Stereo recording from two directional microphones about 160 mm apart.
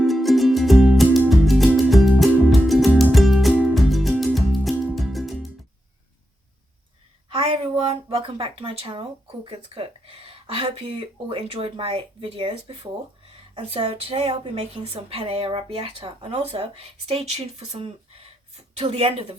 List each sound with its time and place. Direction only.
0.0 s music: centre (ahead or behind)
7.3 s speech: 35° right (ahead or behind)